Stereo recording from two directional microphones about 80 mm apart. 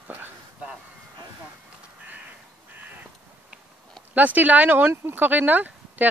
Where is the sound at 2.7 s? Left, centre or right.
Right.